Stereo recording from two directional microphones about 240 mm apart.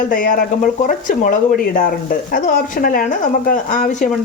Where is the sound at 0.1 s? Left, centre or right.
Left.